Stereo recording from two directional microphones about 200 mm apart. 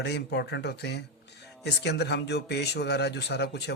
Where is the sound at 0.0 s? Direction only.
55° left (ahead or behind).